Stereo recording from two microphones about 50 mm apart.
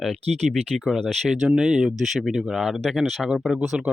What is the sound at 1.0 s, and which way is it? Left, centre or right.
Speech, centre.